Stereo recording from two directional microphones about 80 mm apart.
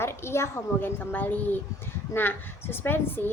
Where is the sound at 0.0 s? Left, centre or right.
Left.